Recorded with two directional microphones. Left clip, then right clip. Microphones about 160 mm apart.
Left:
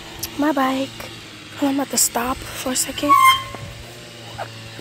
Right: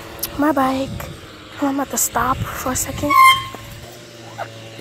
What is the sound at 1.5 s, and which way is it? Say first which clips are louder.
Speech: even; 10° left (ahead or behind).